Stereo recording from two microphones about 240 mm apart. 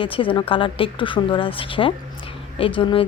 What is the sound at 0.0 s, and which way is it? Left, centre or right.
Speech, left.